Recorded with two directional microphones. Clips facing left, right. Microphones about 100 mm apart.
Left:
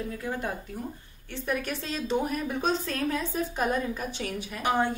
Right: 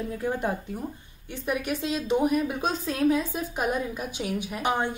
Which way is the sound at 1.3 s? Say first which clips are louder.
Right 2 dB; 10° right (ahead or behind).